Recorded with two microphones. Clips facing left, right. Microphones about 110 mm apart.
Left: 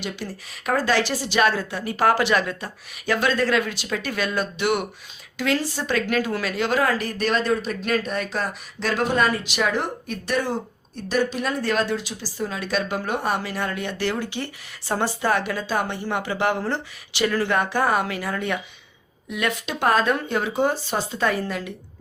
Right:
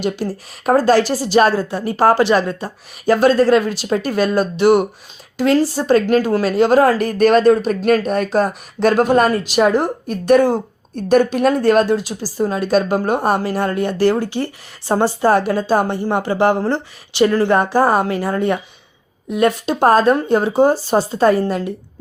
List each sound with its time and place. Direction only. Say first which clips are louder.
0.0 s a woman's voice: right 10 dB; 40° right (ahead or behind)